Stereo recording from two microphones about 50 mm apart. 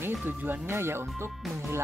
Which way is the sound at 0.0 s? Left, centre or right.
Right.